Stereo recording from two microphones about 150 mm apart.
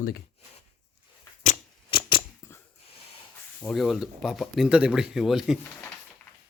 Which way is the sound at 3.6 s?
Centre (ahead or behind).